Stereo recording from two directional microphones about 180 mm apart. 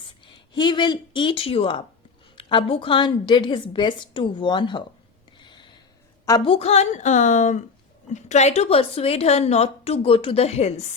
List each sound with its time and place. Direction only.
0.5 s a woman's voice: 25° left (ahead or behind)
5.4 s gasp: 25° left (ahead or behind)
6.2 s a woman's voice: 25° left (ahead or behind)